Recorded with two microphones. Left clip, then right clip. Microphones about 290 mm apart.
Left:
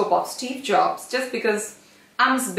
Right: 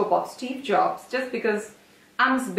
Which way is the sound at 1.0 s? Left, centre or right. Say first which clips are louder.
Left 2 dB; centre.